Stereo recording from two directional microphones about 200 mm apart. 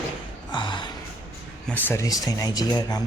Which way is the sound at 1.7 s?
10° left (ahead or behind).